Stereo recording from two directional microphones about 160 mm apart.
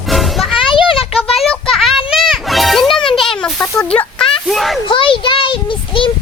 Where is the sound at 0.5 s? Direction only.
30° left (ahead or behind).